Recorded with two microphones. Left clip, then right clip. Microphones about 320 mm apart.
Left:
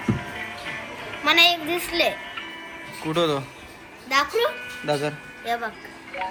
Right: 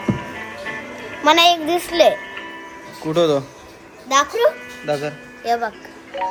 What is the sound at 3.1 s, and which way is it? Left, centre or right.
Speech, centre.